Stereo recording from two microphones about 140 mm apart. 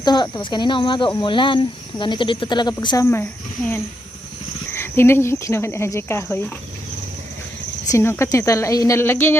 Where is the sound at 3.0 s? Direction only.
15° left (ahead or behind).